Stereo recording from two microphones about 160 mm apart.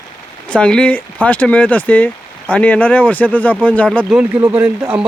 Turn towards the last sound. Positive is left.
turn(degrees=-10)  # may be behind; listen again after turning